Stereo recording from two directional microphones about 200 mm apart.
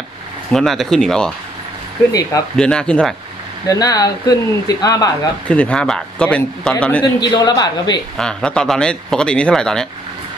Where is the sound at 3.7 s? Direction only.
20° left (ahead or behind).